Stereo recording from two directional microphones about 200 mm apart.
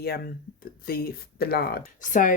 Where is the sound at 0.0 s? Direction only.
50° left (ahead or behind).